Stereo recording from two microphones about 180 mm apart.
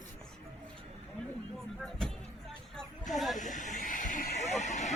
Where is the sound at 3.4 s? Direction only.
45° left (ahead or behind).